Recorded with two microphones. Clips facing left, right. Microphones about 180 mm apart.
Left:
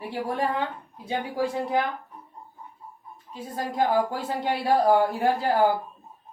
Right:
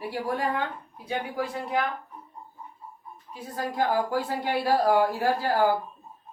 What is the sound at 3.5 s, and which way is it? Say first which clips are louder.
A woman's voice: left 2 dB; 25° left (ahead or behind).